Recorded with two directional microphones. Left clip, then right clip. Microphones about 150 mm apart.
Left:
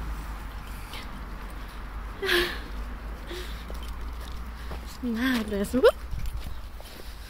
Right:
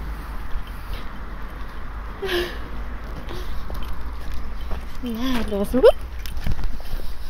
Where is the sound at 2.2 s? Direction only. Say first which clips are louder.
Even; 25° left (ahead or behind).